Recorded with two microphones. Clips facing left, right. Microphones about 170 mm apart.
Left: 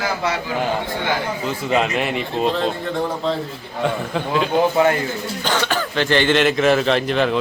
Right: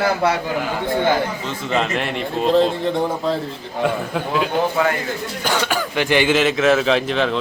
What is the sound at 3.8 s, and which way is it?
Speech, 5° right (ahead or behind).